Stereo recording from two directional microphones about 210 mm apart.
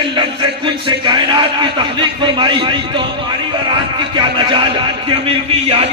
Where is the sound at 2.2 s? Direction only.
20° right (ahead or behind).